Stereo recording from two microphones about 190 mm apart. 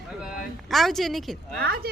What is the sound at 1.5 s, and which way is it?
Speech, 55° right (ahead or behind).